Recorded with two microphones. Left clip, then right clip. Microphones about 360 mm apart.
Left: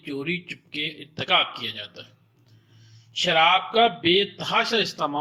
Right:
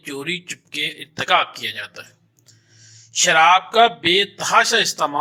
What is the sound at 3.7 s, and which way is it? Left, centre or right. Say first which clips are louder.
Speech: right 5 dB; right.